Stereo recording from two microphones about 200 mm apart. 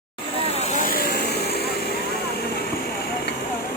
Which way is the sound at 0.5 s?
35° left (ahead or behind).